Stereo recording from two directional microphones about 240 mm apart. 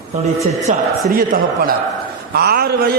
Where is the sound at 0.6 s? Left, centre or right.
Right.